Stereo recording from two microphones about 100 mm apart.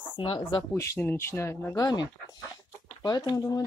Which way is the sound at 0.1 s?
55° left (ahead or behind).